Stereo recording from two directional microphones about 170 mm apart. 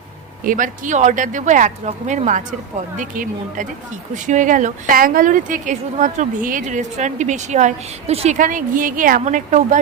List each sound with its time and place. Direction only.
0.4 s a woman's voice: 50° right (ahead or behind)
8.4 s a woman's voice: 50° right (ahead or behind)